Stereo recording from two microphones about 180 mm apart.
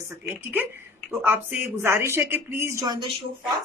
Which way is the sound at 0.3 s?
10° right (ahead or behind).